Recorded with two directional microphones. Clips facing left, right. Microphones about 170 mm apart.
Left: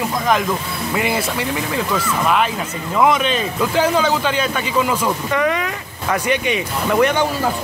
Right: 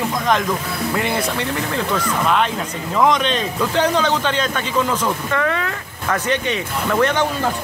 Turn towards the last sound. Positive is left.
turn(degrees=10)  # may be behind; listen again after turning